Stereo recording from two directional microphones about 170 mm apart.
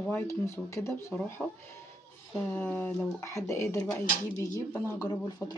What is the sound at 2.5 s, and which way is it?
Speech, 15° left (ahead or behind).